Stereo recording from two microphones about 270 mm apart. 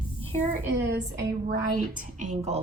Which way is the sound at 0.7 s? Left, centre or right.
Right.